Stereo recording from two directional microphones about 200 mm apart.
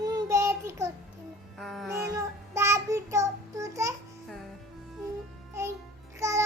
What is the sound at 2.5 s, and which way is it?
Child singing, 15° right (ahead or behind).